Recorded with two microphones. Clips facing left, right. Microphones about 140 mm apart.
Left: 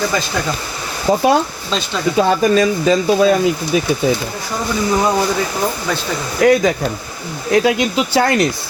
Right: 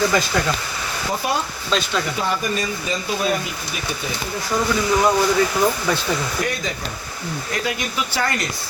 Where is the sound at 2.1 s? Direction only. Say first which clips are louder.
Left 10 dB; 90° left.